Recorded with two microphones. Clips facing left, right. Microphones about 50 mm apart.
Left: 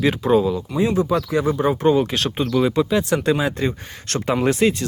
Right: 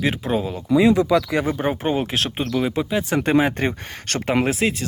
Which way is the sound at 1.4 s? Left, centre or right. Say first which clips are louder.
Left 3 dB; right.